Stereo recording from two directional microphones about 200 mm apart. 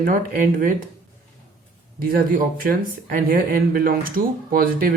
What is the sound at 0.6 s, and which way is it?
Speech, 40° right (ahead or behind).